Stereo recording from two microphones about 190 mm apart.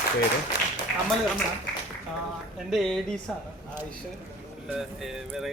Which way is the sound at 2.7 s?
Centre (ahead or behind).